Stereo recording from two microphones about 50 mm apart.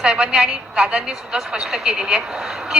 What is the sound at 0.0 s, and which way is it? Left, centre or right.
A woman's voice, centre.